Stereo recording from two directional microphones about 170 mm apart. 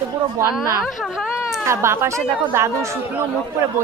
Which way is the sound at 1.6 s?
15° right (ahead or behind).